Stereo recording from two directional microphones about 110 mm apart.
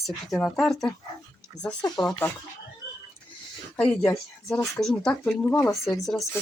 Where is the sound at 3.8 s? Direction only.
10° left (ahead or behind).